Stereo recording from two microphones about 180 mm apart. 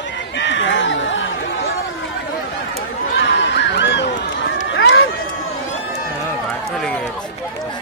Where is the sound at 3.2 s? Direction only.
75° left (ahead or behind).